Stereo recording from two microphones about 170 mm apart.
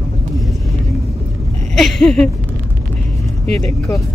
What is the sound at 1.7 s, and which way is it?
Speech, centre (ahead or behind).